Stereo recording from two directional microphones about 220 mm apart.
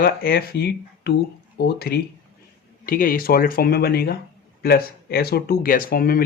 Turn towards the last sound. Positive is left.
turn(degrees=40)  # may be behind; listen again after turning